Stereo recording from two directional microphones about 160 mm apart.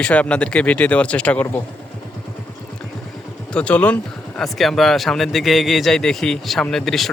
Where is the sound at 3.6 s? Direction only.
10° left (ahead or behind).